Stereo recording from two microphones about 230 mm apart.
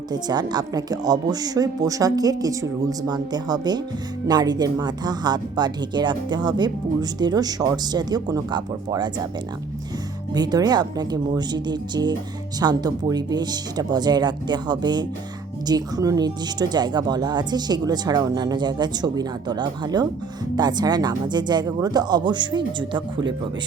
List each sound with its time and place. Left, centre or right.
0.1 s a woman's voice: centre
10.3 s a woman's voice: centre